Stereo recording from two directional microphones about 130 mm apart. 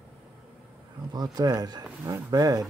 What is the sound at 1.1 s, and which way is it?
Speech, 30° right (ahead or behind).